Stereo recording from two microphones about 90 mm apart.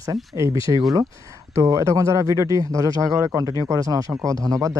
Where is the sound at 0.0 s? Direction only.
35° right (ahead or behind).